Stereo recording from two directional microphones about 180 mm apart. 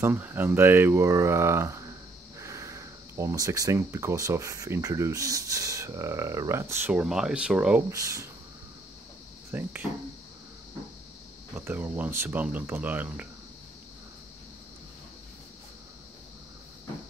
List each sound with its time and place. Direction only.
0.0 s speech: 10° right (ahead or behind)
7.9 s speech: 15° right (ahead or behind)
9.5 s speech: 10° right (ahead or behind)
11.5 s speech: 10° right (ahead or behind)